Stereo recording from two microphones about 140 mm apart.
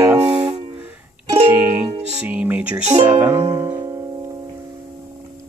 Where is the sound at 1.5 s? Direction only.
10° right (ahead or behind).